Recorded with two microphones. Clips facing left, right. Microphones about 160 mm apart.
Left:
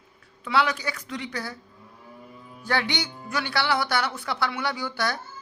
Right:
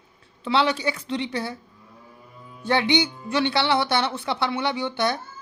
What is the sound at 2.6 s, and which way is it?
A man's voice, 25° right (ahead or behind).